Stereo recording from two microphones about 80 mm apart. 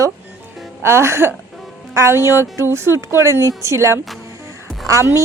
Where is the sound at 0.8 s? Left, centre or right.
Right.